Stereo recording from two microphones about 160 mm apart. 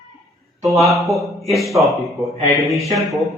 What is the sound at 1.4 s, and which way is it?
Speech, centre (ahead or behind).